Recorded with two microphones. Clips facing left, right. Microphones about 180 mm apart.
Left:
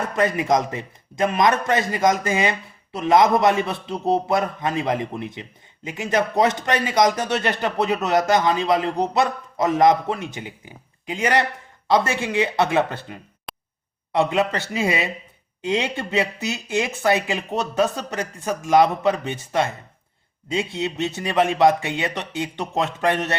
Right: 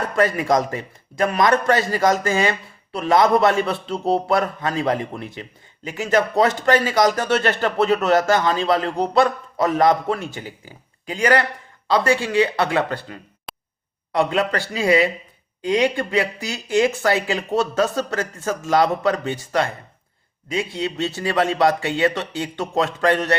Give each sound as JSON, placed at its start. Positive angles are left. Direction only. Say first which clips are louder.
{"t": 0.1, "sound": "a man's voice", "louder": "right 2 dB", "side_deg": 20}